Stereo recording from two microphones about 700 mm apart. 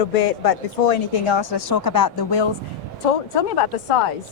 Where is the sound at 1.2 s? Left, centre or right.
Left.